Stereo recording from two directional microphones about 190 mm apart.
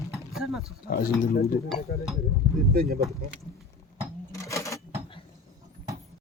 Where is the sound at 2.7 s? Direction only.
50° right (ahead or behind).